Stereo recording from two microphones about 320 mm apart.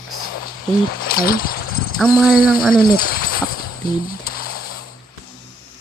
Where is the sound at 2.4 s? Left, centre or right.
Centre.